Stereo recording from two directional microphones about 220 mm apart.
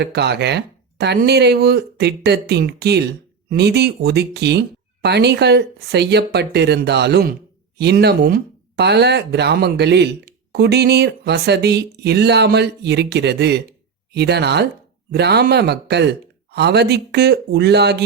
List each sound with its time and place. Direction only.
0.0 s speech: 50° right (ahead or behind)